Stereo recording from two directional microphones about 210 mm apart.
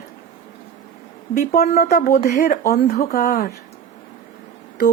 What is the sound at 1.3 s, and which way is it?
Speech, 40° left (ahead or behind).